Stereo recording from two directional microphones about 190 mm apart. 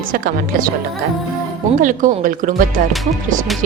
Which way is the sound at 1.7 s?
45° right (ahead or behind).